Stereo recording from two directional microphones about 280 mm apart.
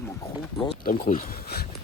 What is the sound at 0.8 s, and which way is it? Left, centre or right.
Speech, left.